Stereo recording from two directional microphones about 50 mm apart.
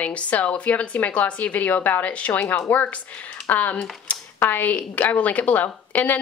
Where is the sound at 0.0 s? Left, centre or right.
Left.